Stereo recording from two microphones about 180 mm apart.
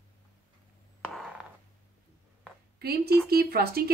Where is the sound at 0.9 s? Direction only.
5° left (ahead or behind).